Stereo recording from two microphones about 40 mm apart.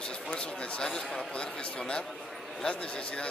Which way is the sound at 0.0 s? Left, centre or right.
Left.